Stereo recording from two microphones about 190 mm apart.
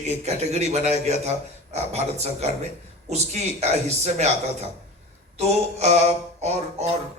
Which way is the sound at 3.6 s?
35° right (ahead or behind).